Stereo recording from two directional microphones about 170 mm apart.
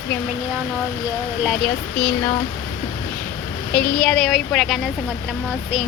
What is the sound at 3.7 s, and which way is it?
A woman's voice, 5° left (ahead or behind).